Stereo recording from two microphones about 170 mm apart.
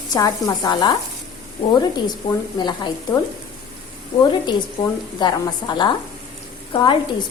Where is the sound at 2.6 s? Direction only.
25° left (ahead or behind).